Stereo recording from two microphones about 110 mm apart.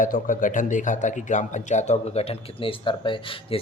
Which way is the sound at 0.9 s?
90° left.